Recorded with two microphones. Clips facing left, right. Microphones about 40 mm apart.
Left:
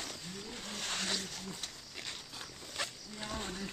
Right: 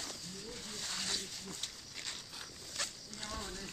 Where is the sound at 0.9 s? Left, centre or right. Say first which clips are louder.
Left 4 dB; left.